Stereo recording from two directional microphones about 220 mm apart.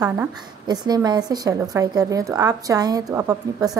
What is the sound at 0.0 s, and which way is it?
A woman's voice, 15° right (ahead or behind).